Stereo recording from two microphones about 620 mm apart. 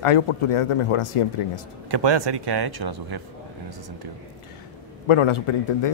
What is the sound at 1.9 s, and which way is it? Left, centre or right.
Speech, right.